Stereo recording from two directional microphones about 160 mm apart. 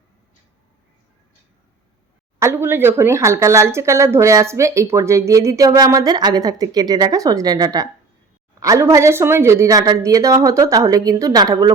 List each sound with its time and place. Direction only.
2.4 s speech: 15° right (ahead or behind)